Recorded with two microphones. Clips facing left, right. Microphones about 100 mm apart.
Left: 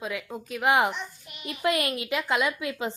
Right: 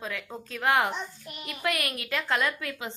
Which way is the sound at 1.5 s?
25° left (ahead or behind).